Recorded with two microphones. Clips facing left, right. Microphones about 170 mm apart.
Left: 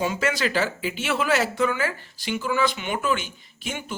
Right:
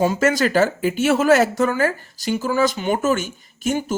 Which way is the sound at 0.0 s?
45° right (ahead or behind).